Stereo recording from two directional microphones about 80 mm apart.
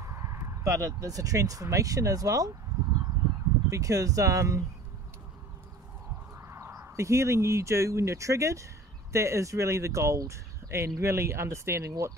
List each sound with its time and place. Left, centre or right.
0.0 s speech: right
6.3 s speech: right